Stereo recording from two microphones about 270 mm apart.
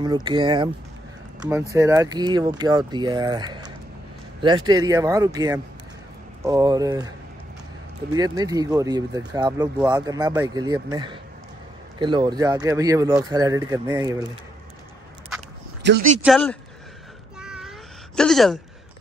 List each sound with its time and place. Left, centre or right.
0.0 s speech: centre
1.7 s speech: centre
8.1 s speech: centre
15.8 s speech: right
16.2 s speech: centre
17.4 s cat: centre